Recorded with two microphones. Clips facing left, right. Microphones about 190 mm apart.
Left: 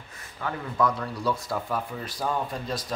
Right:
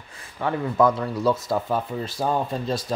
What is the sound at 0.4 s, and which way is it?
Speech, 25° right (ahead or behind).